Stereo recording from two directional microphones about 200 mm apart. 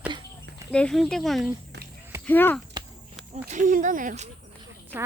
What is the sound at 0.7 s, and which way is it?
Speech, 5° left (ahead or behind).